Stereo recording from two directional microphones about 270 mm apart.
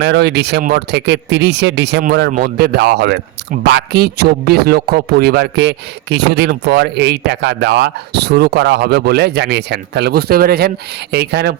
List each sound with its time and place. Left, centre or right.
0.0 s a man's voice: right